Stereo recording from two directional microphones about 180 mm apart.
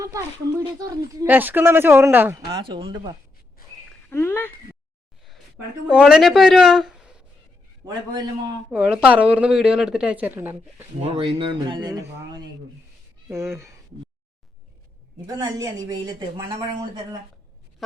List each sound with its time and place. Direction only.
0.6 s speech: 20° right (ahead or behind)
2.5 s speech: 25° right (ahead or behind)
4.1 s speech: 10° left (ahead or behind)
5.9 s speech: 5° right (ahead or behind)
8.7 s speech: 5° right (ahead or behind)
11.0 s speech: 30° right (ahead or behind); by 13.7 s 15° right (ahead or behind)
15.4 s speech: 20° right (ahead or behind)